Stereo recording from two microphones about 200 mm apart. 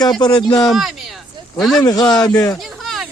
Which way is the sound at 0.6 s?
Centre (ahead or behind).